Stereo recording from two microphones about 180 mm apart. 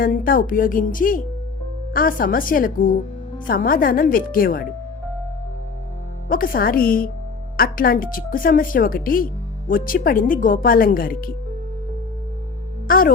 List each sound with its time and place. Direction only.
0.0 s a woman's voice: 50° left (ahead or behind)
6.2 s a woman's voice: 50° left (ahead or behind)
12.9 s a woman's voice: 50° left (ahead or behind)